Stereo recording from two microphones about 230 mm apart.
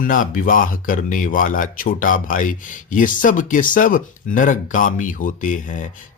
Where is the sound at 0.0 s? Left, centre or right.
Left.